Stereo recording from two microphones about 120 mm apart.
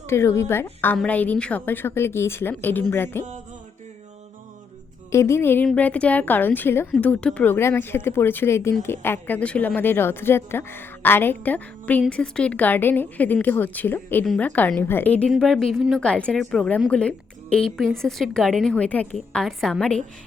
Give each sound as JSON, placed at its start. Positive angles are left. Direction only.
{"t": 0.1, "sound": "a woman's voice", "side_deg": 25}
{"t": 5.1, "sound": "a woman's voice", "side_deg": 25}